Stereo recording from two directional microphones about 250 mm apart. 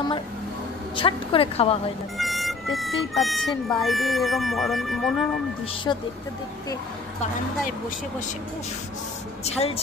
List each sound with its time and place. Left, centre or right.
0.9 s a woman's voice: centre
2.1 s speech: centre
5.9 s speech: centre
9.4 s a woman's voice: left